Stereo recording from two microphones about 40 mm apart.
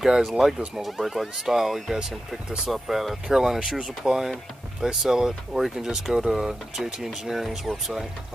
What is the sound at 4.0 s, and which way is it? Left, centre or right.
Speech, centre.